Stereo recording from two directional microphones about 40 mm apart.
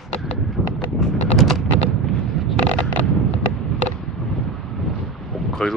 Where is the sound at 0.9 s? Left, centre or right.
Centre.